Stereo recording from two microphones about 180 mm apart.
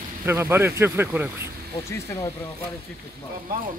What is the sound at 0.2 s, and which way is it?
Speech, 15° right (ahead or behind).